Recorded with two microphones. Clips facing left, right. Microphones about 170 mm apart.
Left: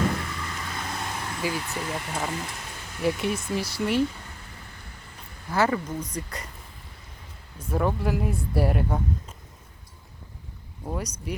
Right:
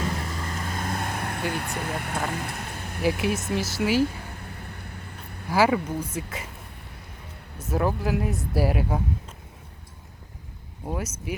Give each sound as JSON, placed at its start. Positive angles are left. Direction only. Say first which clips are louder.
{"t": 0.2, "sound": "vehicle", "louder": "right 2 dB", "side_deg": -40}
{"t": 3.0, "sound": "speech", "louder": "right 1 dB", "side_deg": 0}
{"t": 5.5, "sound": "speech", "louder": "right 3 dB", "side_deg": -10}
{"t": 7.7, "sound": "speech", "louder": "right 1 dB", "side_deg": 0}
{"t": 10.8, "sound": "speech", "louder": "right 1 dB", "side_deg": -5}